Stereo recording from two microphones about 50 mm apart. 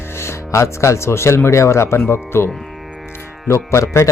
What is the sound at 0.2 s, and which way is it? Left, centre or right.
Speech, left.